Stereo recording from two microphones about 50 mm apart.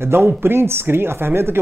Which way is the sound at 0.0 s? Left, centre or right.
Right.